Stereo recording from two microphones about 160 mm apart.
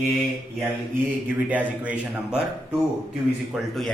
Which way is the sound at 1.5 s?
10° right (ahead or behind).